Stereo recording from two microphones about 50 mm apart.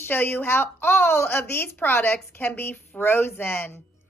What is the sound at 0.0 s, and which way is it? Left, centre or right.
Speech, left.